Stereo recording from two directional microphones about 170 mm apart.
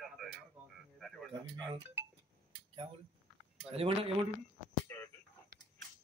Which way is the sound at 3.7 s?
35° right (ahead or behind).